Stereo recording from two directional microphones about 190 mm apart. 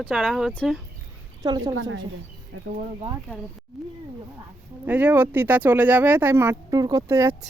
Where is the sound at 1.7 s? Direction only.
90° right.